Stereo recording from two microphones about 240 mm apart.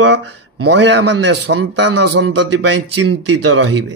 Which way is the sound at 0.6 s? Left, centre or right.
Right.